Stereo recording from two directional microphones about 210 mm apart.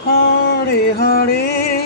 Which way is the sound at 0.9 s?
50° left (ahead or behind).